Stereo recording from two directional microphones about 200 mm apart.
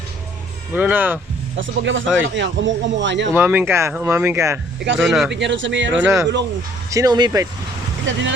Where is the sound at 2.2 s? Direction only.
65° right (ahead or behind).